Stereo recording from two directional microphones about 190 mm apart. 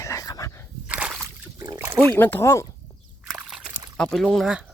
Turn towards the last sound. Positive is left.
turn(degrees=0)  # may be behind; listen again after turning